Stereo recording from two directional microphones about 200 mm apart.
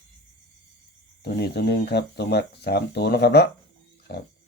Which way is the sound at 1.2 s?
55° left (ahead or behind).